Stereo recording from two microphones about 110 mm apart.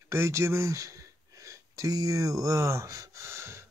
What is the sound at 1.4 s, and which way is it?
Gasp, 30° right (ahead or behind).